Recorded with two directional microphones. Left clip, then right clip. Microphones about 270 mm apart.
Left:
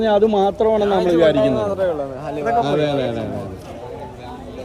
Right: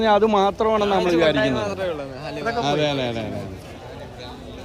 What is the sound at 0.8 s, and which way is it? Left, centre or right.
Speech, centre.